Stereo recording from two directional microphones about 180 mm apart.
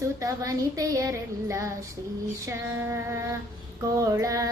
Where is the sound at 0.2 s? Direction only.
20° right (ahead or behind).